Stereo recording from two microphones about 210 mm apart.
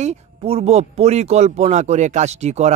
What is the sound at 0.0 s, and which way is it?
Speech, 30° right (ahead or behind).